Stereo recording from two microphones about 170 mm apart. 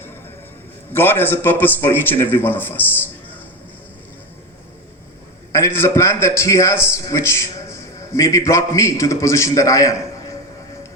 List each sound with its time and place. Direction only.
0.9 s a man's voice: 10° left (ahead or behind)
5.5 s a man's voice: 15° left (ahead or behind)